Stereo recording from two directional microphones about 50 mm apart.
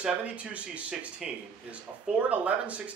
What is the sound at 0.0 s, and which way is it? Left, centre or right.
Speech, right.